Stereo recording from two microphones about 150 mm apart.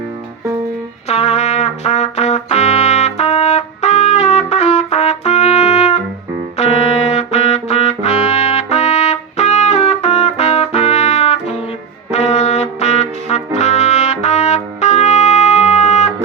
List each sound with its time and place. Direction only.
1.0 s trumpet: 45° left (ahead or behind)
6.6 s music: 45° left (ahead or behind)
12.1 s trumpet: 50° left (ahead or behind)